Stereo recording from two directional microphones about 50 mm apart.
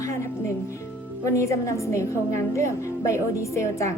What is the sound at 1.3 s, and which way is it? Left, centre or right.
A woman's voice, left.